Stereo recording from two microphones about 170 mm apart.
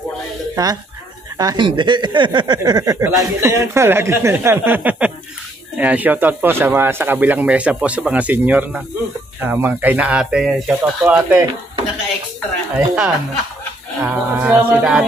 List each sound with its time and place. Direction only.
0.6 s speech: 20° right (ahead or behind)
12.7 s music: 5° right (ahead or behind)